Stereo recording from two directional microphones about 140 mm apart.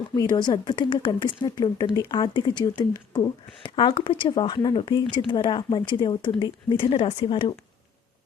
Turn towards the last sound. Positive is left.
turn(degrees=40)  # may be behind; listen again after turning